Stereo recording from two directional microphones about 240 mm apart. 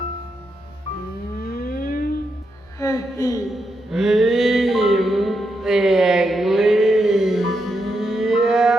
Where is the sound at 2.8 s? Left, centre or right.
Centre.